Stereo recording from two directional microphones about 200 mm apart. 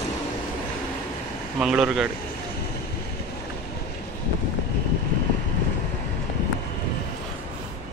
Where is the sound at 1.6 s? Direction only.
5° right (ahead or behind).